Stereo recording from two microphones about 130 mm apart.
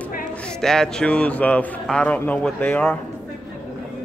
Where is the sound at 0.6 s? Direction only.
5° left (ahead or behind).